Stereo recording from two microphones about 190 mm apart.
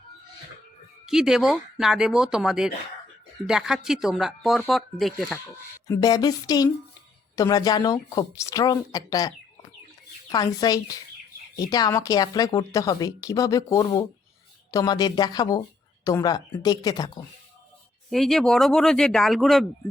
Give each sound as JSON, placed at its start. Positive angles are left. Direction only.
{"t": 1.0, "sound": "speech", "side_deg": 0}
{"t": 5.9, "sound": "a woman's voice", "side_deg": 20}
{"t": 10.3, "sound": "a woman's voice", "side_deg": 20}
{"t": 18.1, "sound": "speech", "side_deg": 0}